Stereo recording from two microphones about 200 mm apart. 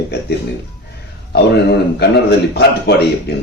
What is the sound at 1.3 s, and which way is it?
A man's voice, 55° left (ahead or behind).